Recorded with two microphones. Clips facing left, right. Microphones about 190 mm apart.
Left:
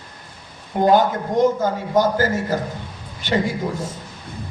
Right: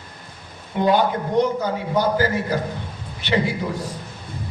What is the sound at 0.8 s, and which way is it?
A man's voice, 45° left (ahead or behind).